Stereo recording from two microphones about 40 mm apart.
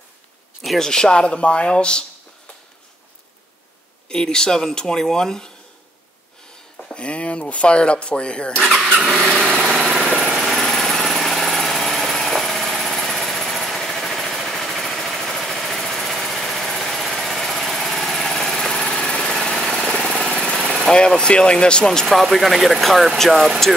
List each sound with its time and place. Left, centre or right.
0.7 s speech: centre
4.1 s speech: centre
6.8 s speech: left
9.0 s vehicle: centre
9.3 s lawn mower: right
9.6 s vehicle: centre
10.3 s a sound: centre
10.6 s vehicle: centre
19.3 s engine: centre
20.8 s speech: left
22.1 s speech: centre